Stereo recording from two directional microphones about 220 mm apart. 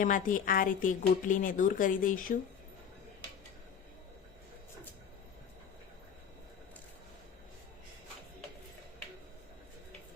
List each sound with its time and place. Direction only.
0.0 s speech: 35° left (ahead or behind)